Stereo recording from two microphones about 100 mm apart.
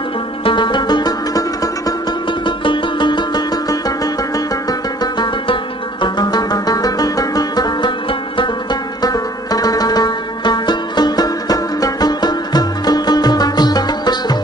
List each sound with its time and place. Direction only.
0.5 s music: 50° left (ahead or behind)
2.4 s music: 50° left (ahead or behind)
4.6 s music: 40° left (ahead or behind)
9.0 s music: 40° left (ahead or behind)